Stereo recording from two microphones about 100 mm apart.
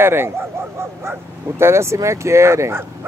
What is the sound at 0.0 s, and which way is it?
Speech, 25° right (ahead or behind).